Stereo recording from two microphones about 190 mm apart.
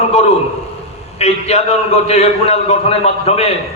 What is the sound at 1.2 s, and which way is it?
A man's voice, 35° left (ahead or behind).